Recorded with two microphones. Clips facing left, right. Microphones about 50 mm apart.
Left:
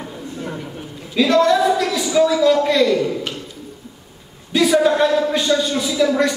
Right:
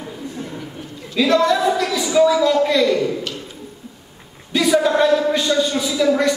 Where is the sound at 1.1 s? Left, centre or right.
Centre.